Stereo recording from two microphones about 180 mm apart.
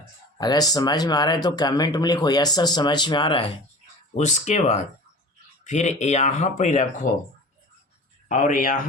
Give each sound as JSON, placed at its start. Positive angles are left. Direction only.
{"t": 0.3, "sound": "speech", "side_deg": 20}
{"t": 4.1, "sound": "speech", "side_deg": 40}
{"t": 8.3, "sound": "a man's voice", "side_deg": 45}